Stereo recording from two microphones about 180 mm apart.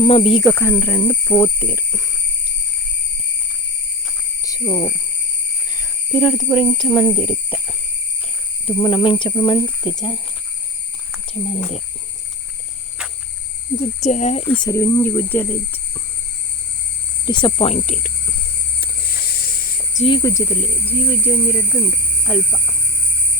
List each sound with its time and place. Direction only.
0.0 s speech: 35° left (ahead or behind)
0.4 s speech: 15° left (ahead or behind)
4.4 s speech: 20° left (ahead or behind)
5.6 s cricket: 20° left (ahead or behind)
6.1 s speech: 5° left (ahead or behind)
6.5 s speech: 5° right (ahead or behind)
8.6 s speech: 25° left (ahead or behind)
11.3 s speech: 35° left (ahead or behind)
13.0 s cricket: 5° right (ahead or behind)
13.7 s speech: 40° left (ahead or behind)
14.6 s speech: 15° left (ahead or behind)
17.2 s speech: 25° left (ahead or behind)
18.8 s snake: 60° left (ahead or behind)
20.1 s speech: 20° left (ahead or behind)